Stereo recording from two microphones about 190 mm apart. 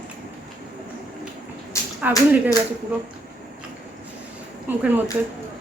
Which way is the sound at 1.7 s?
15° left (ahead or behind).